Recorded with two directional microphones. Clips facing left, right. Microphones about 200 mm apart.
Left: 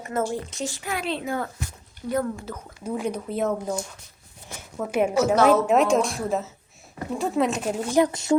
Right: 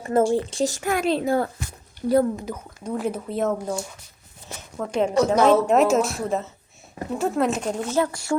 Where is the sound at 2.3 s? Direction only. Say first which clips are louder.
Right 4 dB; 15° right (ahead or behind).